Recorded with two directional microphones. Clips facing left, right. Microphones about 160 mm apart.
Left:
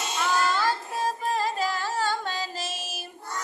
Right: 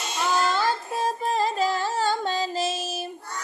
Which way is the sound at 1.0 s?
25° right (ahead or behind).